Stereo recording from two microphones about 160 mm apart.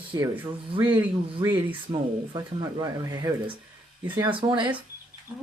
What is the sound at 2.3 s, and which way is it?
Speech, 25° right (ahead or behind).